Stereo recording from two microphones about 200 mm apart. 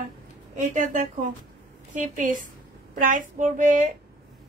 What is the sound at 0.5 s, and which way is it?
A woman's voice, 40° right (ahead or behind).